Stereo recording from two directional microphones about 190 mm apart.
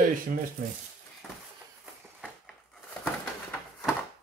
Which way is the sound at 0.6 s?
50° right (ahead or behind).